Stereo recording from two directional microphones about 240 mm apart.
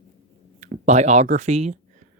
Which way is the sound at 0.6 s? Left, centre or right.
Right.